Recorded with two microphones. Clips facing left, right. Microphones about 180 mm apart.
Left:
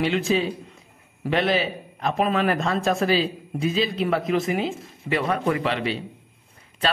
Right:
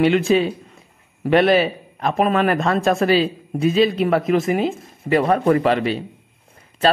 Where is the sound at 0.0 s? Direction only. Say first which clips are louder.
Right 6 dB; 60° right (ahead or behind).